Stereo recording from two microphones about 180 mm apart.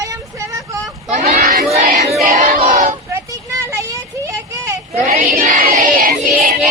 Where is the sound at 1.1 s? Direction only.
40° right (ahead or behind).